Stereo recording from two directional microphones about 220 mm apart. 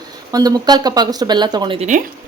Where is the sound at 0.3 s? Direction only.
15° right (ahead or behind).